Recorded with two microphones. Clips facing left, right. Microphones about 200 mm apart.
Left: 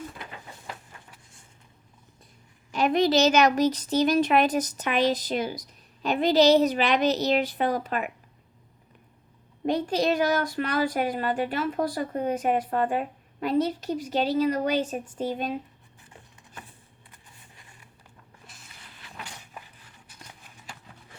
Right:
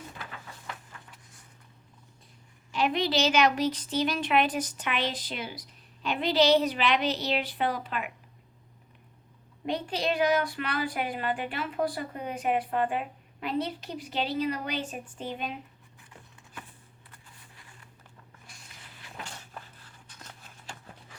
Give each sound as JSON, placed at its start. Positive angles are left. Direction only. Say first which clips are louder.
{"t": 2.7, "sound": "speech", "louder": "left 5 dB", "side_deg": 45}
{"t": 9.6, "sound": "speech", "louder": "left 6 dB", "side_deg": 45}
{"t": 18.4, "sound": "a sound", "louder": "left 2 dB", "side_deg": 5}